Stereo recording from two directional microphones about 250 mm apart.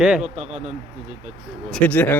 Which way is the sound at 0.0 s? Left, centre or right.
Centre.